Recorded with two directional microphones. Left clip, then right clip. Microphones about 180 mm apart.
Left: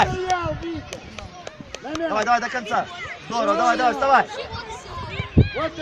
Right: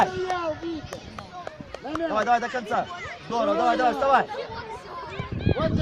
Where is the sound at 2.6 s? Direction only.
35° right (ahead or behind).